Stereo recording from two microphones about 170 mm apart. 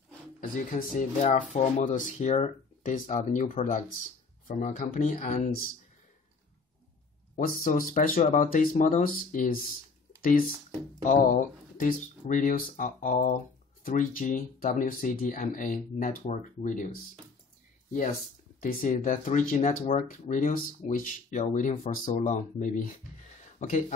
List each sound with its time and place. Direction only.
0.4 s speech: 50° left (ahead or behind)
7.3 s speech: 55° left (ahead or behind)
11.1 s speech: 45° left (ahead or behind)
18.6 s speech: 50° left (ahead or behind)